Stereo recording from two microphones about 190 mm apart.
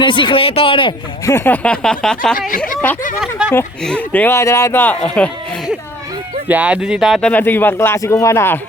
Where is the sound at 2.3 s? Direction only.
45° left (ahead or behind).